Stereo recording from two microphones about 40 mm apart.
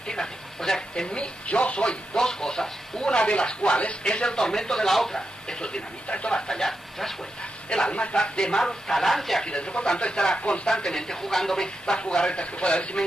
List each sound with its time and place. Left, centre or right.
0.1 s speech: centre
1.1 s speech: left
1.9 s speech: centre
6.6 s speech: centre
7.7 s speech: left; by 9.4 s centre
9.4 s speech: left
10.9 s speech: centre